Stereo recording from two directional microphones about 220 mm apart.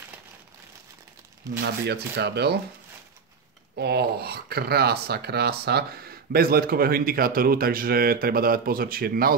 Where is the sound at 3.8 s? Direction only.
45° right (ahead or behind).